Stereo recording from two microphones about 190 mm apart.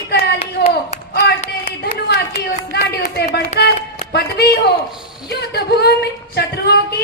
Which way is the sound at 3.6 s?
60° left (ahead or behind).